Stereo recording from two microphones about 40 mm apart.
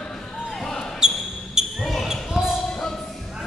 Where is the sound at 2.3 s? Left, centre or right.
Centre.